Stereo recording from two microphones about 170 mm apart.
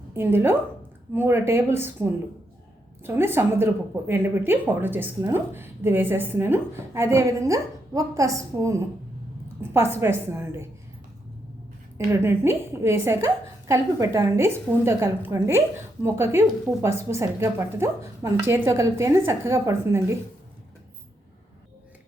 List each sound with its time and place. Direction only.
0.1 s a woman's voice: 15° right (ahead or behind)
11.9 s a woman's voice: 15° right (ahead or behind)